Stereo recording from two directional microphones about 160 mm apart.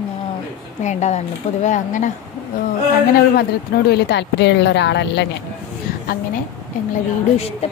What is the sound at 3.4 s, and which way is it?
Speech, 90° left.